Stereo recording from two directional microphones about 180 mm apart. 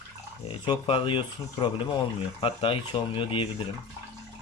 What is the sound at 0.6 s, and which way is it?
Speech, 30° left (ahead or behind).